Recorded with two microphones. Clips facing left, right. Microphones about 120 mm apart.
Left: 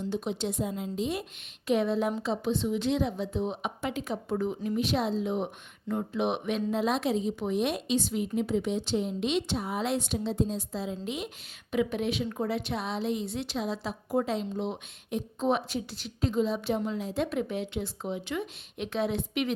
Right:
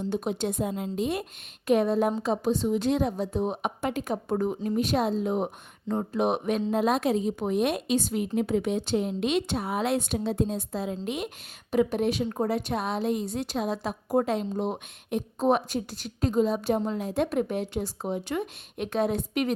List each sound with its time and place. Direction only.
0.0 s a woman's voice: 50° right (ahead or behind)
6.7 s a woman's voice: 50° right (ahead or behind)
11.7 s a woman's voice: 40° right (ahead or behind)